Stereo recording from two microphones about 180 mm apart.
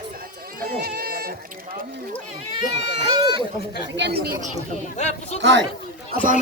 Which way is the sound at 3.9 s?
75° right (ahead or behind).